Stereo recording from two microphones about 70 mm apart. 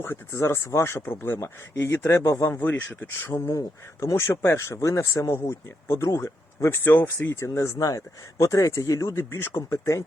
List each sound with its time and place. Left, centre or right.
0.0 s speech: left
2.4 s speech: left
4.0 s speech: left